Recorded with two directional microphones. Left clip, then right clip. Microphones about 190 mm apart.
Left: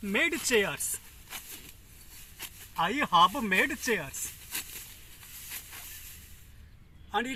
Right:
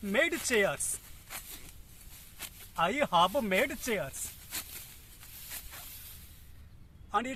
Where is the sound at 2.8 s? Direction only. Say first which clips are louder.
Left 3 dB; 35° right (ahead or behind).